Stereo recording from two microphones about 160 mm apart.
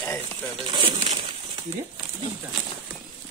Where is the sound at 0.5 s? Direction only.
30° right (ahead or behind).